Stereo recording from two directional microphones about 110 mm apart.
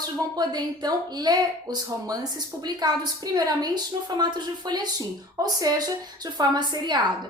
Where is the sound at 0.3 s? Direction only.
35° right (ahead or behind).